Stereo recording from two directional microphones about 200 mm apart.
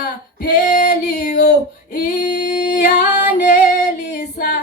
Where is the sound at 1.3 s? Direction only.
55° left (ahead or behind).